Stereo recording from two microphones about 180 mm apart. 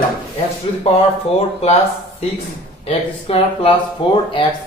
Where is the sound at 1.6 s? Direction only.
35° left (ahead or behind).